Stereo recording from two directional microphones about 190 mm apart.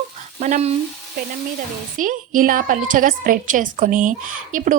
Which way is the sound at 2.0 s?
45° right (ahead or behind).